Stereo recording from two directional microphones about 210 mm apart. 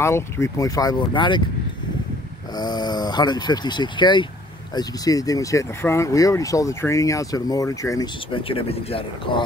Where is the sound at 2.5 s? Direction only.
20° left (ahead or behind).